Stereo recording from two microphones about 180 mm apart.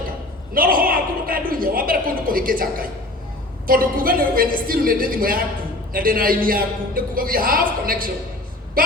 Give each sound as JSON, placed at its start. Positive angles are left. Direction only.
{"t": 0.5, "sound": "a man's voice", "side_deg": -50}